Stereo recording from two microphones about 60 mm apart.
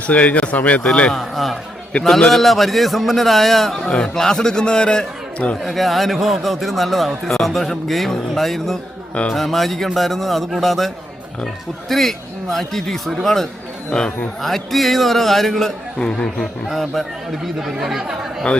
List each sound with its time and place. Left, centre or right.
0.1 s speech: left
1.1 s a man's voice: centre
5.6 s a man's voice: centre
13.9 s a man's voice: centre
14.4 s a man's voice: centre
16.6 s a man's voice: centre